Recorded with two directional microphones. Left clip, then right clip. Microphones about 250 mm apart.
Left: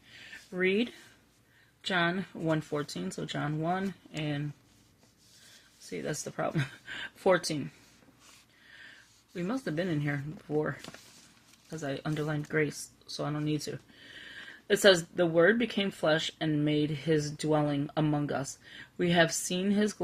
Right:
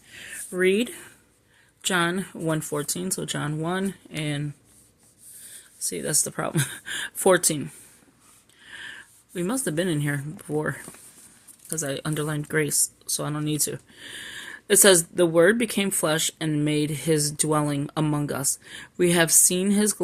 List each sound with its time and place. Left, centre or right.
0.1 s a sound: right
1.8 s speech: right
5.9 s speech: right
8.7 s speech: right